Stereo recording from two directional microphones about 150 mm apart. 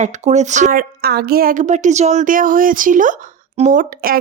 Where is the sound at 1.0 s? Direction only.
90° right.